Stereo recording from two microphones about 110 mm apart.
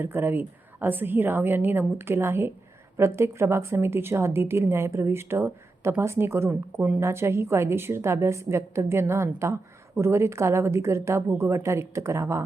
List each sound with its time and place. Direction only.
0.0 s a woman's voice: 20° right (ahead or behind)
6.7 s a woman's voice: 10° right (ahead or behind)
7.0 s a woman's voice: 25° right (ahead or behind)